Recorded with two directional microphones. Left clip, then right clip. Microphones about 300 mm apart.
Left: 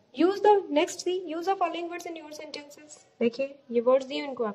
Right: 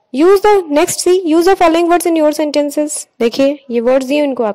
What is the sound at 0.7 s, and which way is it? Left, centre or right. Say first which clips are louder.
A woman's voice: right 15 dB; right.